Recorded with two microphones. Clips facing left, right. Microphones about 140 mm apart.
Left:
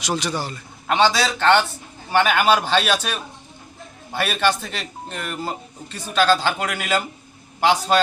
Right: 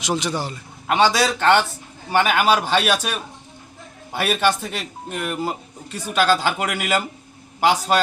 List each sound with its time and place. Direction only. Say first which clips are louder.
0.0 s speech: right 1 dB; 20° right (ahead or behind)